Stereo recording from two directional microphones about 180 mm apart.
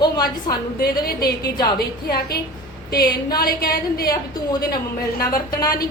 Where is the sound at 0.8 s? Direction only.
60° left (ahead or behind).